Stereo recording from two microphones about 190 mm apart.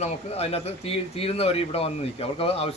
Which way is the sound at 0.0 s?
30° left (ahead or behind).